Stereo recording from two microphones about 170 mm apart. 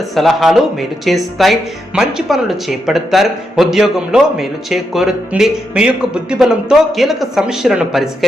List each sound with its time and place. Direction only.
0.1 s speech: centre (ahead or behind)